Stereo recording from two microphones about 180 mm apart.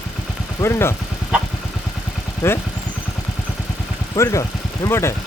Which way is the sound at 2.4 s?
15° left (ahead or behind).